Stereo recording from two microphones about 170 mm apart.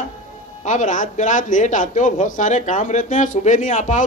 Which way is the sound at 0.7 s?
50° left (ahead or behind).